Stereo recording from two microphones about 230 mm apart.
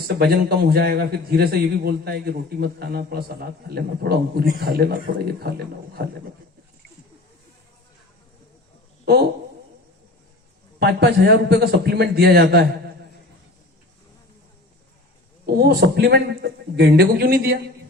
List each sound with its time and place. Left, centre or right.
0.2 s a man's voice: right
10.8 s a man's voice: right
15.4 s a man's voice: right